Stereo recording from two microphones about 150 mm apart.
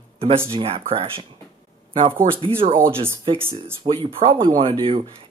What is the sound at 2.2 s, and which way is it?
Speech, 60° right (ahead or behind).